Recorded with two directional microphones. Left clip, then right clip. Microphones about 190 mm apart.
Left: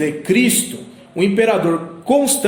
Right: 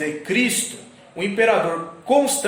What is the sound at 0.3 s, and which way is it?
Speech, 55° left (ahead or behind).